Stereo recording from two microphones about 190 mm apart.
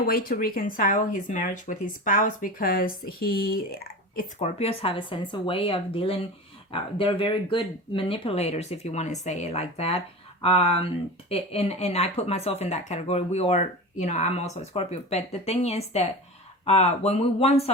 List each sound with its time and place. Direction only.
0.0 s speech: 50° left (ahead or behind)
4.4 s speech: 35° left (ahead or behind)